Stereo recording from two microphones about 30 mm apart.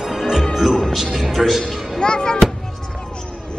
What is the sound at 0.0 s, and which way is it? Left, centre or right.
Music, centre.